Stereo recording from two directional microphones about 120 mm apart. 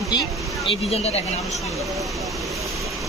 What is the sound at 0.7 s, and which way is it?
Speech, 55° left (ahead or behind).